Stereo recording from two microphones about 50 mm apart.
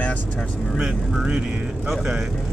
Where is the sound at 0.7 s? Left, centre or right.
Centre.